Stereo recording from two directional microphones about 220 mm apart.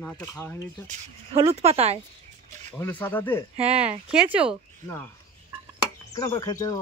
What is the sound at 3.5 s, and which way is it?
Speech, 25° right (ahead or behind).